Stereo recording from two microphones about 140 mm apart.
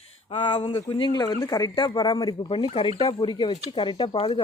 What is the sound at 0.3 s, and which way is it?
Speech, 40° left (ahead or behind).